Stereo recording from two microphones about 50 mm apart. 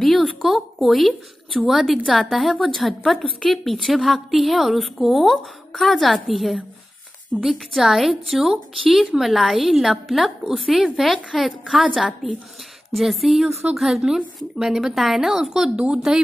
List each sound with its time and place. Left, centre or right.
0.0 s a woman's voice: centre
11.6 s a woman's voice: centre
15.7 s speech: right